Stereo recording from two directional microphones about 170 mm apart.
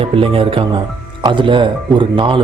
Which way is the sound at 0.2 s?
30° right (ahead or behind).